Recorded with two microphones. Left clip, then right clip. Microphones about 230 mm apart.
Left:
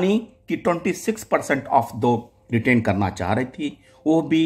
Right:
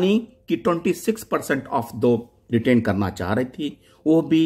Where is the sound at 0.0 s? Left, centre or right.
Centre.